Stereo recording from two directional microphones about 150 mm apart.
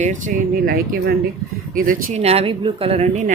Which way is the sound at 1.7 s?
65° right (ahead or behind).